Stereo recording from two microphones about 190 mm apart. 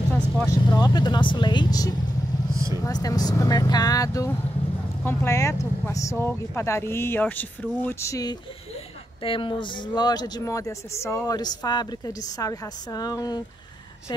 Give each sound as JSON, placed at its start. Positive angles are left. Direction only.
{"t": 0.1, "sound": "speech", "side_deg": 10}
{"t": 0.8, "sound": "a woman's voice", "side_deg": 20}
{"t": 2.5, "sound": "vehicle", "side_deg": -15}
{"t": 2.8, "sound": "a woman's voice", "side_deg": 20}